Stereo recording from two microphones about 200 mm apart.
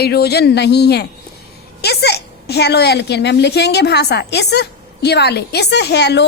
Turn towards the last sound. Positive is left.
turn(degrees=60)  # may be behind; listen again after turning